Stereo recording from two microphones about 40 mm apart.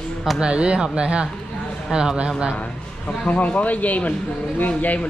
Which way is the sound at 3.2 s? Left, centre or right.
Left.